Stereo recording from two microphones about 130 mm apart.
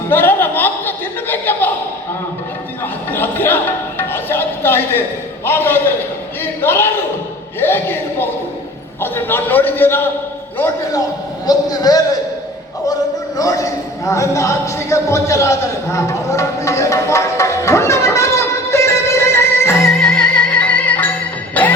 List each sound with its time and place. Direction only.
0.1 s chuckle: 15° left (ahead or behind)
3.1 s music: 15° left (ahead or behind)
5.5 s a man's voice: 15° left (ahead or behind)
11.4 s a man's voice: 30° left (ahead or behind)
12.9 s a sound: 25° left (ahead or behind)
19.9 s music: 5° left (ahead or behind)